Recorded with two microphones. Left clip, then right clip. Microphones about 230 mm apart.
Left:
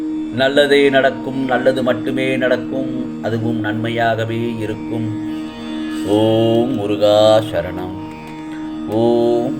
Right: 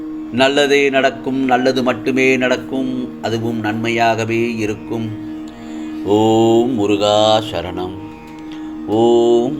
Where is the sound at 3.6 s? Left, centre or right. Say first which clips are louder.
Right 3 dB; right.